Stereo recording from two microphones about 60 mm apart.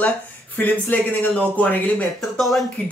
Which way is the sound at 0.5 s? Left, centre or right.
Left.